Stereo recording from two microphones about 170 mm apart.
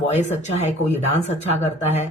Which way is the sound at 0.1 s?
40° left (ahead or behind).